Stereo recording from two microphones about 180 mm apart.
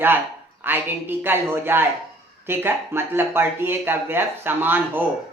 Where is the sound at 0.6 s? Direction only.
10° right (ahead or behind).